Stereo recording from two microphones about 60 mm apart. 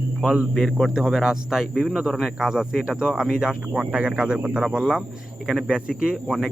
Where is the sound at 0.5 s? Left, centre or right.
Centre.